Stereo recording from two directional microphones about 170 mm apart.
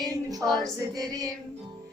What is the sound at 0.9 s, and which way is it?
Female singing, 20° right (ahead or behind).